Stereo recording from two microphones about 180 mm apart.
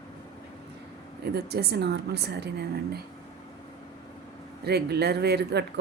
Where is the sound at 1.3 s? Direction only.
60° right (ahead or behind).